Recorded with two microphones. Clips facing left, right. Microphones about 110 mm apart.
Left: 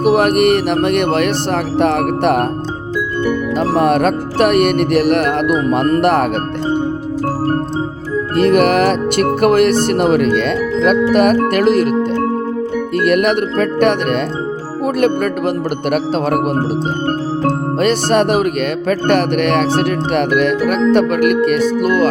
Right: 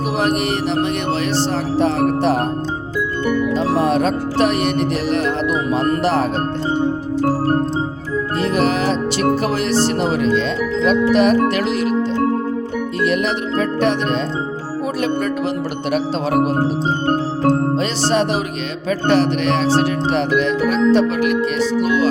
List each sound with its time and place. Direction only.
0.0 s speech: 55° left (ahead or behind)
3.6 s speech: 60° left (ahead or behind)
8.4 s speech: 60° left (ahead or behind)
17.7 s speech: 55° left (ahead or behind)